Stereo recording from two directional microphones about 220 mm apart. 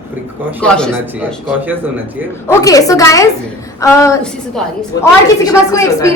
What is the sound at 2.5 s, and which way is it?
A woman's voice, 15° left (ahead or behind).